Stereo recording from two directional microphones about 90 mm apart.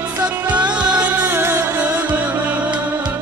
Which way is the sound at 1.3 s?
30° right (ahead or behind).